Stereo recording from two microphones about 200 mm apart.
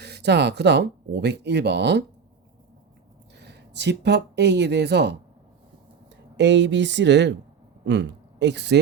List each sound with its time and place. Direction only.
0.0 s speech: 55° right (ahead or behind)
3.3 s speech: 60° right (ahead or behind)
6.3 s speech: 60° right (ahead or behind)